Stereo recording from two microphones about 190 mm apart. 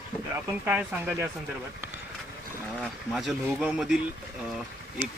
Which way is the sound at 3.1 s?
Centre (ahead or behind).